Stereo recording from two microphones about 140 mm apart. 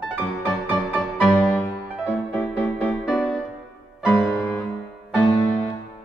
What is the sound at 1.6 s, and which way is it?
Music, 10° left (ahead or behind).